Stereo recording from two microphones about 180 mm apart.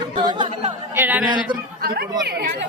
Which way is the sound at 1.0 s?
10° right (ahead or behind).